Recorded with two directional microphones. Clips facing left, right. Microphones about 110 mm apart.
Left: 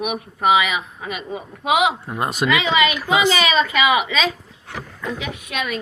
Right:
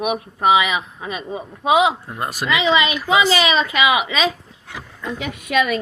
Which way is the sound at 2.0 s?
20° left (ahead or behind).